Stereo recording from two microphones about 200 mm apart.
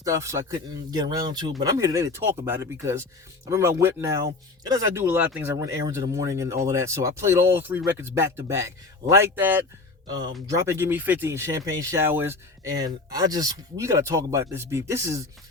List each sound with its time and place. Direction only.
0.0 s speech: 15° right (ahead or behind)
10.1 s speech: 20° right (ahead or behind)